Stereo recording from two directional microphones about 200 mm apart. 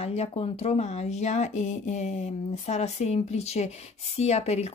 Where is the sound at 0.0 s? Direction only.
30° left (ahead or behind).